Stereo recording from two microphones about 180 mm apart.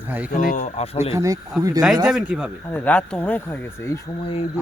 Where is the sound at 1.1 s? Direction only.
20° right (ahead or behind).